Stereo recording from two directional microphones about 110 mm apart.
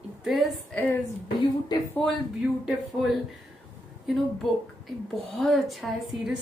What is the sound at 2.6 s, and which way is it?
A woman's voice, centre (ahead or behind).